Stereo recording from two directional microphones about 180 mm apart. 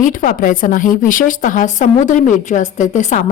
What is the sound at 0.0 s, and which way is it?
A woman's voice, 50° left (ahead or behind).